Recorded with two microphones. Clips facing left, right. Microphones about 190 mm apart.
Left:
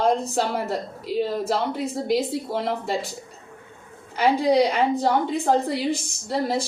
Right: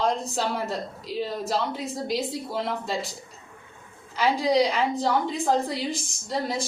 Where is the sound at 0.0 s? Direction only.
60° left (ahead or behind).